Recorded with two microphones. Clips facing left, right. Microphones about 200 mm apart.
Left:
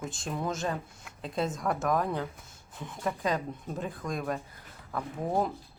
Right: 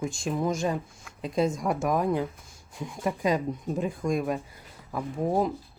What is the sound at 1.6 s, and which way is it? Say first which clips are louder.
Speech: right 3 dB; 20° right (ahead or behind).